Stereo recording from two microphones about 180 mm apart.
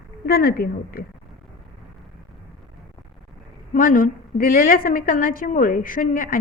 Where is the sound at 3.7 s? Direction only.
50° left (ahead or behind).